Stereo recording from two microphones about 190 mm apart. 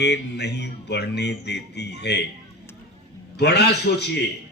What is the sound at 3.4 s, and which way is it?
Speech, 60° left (ahead or behind).